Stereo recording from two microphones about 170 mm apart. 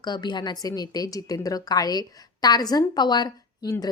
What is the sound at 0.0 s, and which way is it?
A woman's voice, 25° left (ahead or behind).